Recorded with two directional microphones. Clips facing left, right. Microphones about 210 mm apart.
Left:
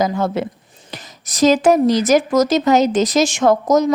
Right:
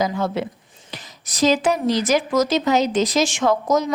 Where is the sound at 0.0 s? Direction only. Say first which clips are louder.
Left 3 dB; 45° left (ahead or behind).